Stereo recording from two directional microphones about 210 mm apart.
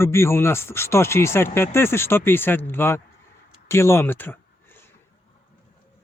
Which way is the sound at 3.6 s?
10° left (ahead or behind).